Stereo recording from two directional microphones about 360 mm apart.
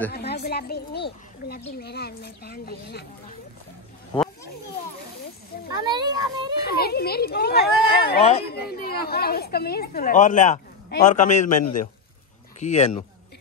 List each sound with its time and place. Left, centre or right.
0.1 s a woman's voice: left
5.9 s a child's voice: centre
6.6 s a woman's voice: left